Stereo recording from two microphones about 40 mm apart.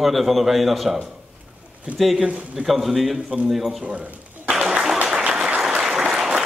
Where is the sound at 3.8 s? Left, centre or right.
Right.